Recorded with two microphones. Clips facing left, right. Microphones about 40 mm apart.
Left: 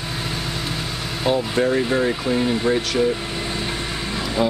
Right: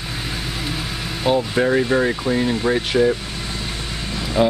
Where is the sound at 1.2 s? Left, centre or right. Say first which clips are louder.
Right 2 dB; centre.